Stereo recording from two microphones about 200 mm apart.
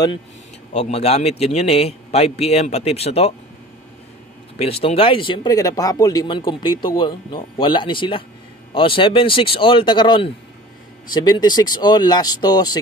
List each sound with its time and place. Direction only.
0.7 s a man's voice: 35° left (ahead or behind)
4.6 s speech: 30° left (ahead or behind)